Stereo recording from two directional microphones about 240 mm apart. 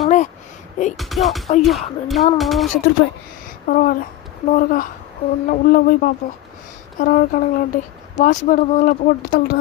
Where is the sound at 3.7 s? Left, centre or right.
Left.